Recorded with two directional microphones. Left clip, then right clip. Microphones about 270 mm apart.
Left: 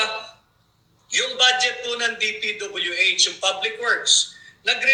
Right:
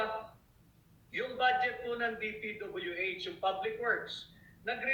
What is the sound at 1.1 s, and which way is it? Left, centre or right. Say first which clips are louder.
A man's voice: left 12 dB; left.